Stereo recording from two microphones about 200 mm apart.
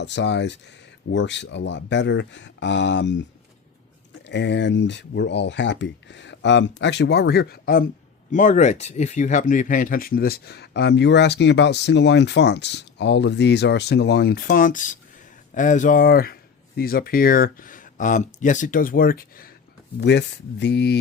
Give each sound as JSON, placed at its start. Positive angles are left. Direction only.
{"t": 0.0, "sound": "speech", "side_deg": 60}
{"t": 4.3, "sound": "speech", "side_deg": 60}
{"t": 20.0, "sound": "speech", "side_deg": 60}